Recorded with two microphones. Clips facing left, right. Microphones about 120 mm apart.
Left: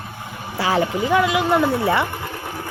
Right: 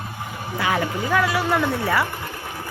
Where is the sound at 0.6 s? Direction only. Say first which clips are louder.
Left 4 dB; 30° left (ahead or behind).